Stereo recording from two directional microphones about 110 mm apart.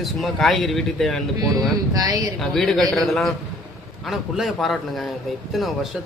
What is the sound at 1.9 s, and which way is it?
Speech, 35° right (ahead or behind).